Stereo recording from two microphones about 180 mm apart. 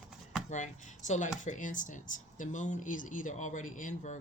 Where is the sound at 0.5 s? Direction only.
40° left (ahead or behind).